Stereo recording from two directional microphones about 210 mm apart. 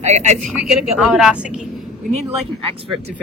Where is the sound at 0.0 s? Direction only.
35° right (ahead or behind).